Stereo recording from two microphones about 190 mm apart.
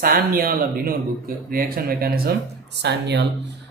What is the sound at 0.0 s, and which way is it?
Speech, 50° right (ahead or behind).